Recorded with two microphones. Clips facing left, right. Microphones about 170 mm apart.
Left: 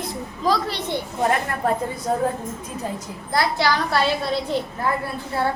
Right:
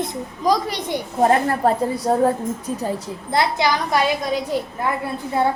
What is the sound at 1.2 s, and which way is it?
A woman's voice, 30° right (ahead or behind).